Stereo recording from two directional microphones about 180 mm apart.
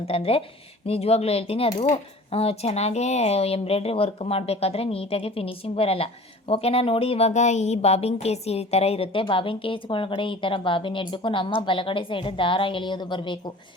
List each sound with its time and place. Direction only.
0.0 s speech: 35° left (ahead or behind)